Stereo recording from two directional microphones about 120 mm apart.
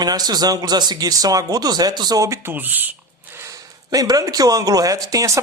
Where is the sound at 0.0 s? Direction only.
35° right (ahead or behind); by 2.9 s 15° right (ahead or behind).